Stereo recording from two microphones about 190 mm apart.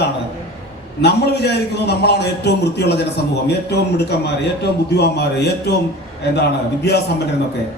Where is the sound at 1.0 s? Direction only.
60° left (ahead or behind).